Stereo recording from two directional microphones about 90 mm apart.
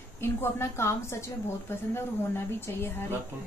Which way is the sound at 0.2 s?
30° left (ahead or behind).